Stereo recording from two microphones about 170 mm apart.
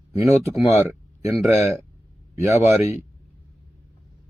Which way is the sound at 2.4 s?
15° right (ahead or behind).